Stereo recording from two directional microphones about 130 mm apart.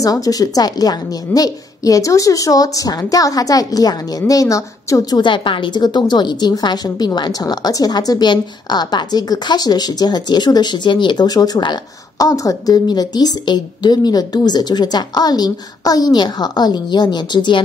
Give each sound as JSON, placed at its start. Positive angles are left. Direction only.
{"t": 0.0, "sound": "a woman's voice", "side_deg": 30}
{"t": 5.2, "sound": "a woman's voice", "side_deg": 40}